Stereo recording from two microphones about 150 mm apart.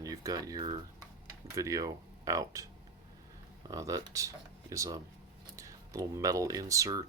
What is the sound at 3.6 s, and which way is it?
Speech, 25° right (ahead or behind).